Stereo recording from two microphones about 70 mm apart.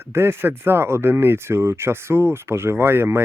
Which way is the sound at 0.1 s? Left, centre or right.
Right.